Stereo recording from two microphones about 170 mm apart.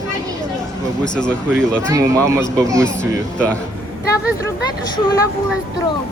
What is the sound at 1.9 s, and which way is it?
Speech, 20° right (ahead or behind).